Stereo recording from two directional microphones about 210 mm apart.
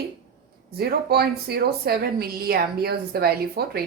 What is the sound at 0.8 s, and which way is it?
A woman's voice, 50° right (ahead or behind).